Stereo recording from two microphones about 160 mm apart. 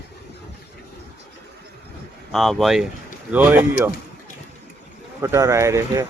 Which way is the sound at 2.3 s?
Centre (ahead or behind).